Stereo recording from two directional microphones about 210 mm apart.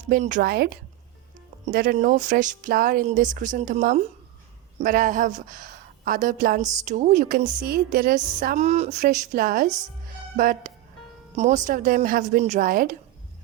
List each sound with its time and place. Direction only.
0.1 s a woman's voice: 40° right (ahead or behind)
8.5 s speech: 30° right (ahead or behind)
9.0 s a woman's voice: 45° right (ahead or behind)